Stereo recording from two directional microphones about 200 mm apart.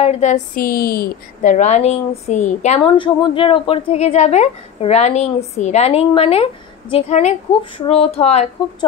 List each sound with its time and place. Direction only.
0.0 s a woman's voice: 35° left (ahead or behind)
3.0 s a woman's voice: 25° left (ahead or behind)